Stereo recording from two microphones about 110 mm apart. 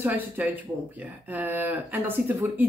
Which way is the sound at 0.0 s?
15° right (ahead or behind).